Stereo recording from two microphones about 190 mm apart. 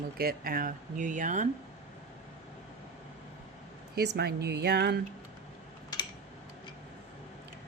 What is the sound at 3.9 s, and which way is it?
A woman's voice, 60° right (ahead or behind).